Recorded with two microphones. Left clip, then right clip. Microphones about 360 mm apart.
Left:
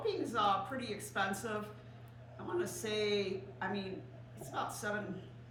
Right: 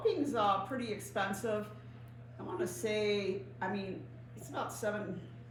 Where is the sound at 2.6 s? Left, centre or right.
Centre.